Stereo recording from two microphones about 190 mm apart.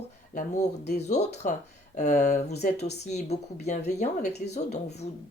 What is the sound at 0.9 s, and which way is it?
Speech, 35° left (ahead or behind).